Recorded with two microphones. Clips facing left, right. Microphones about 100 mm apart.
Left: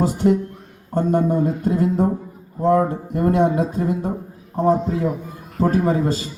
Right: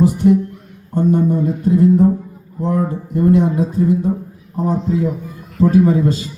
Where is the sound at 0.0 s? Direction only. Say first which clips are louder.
Right 4 dB; 60° left (ahead or behind).